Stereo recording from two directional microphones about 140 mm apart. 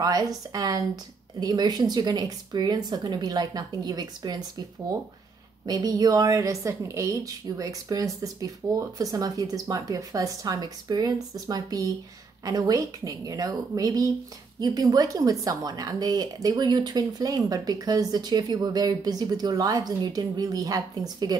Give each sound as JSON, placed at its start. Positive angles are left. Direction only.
{"t": 0.0, "sound": "speech", "side_deg": -25}
{"t": 5.7, "sound": "speech", "side_deg": -30}